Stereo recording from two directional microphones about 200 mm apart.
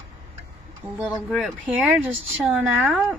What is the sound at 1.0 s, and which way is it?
Speech, centre (ahead or behind).